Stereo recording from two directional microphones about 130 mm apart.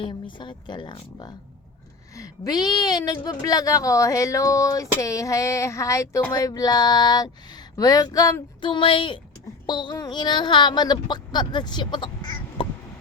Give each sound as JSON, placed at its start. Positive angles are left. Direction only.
{"t": 0.0, "sound": "speech", "side_deg": 40}
{"t": 8.6, "sound": "speech", "side_deg": 40}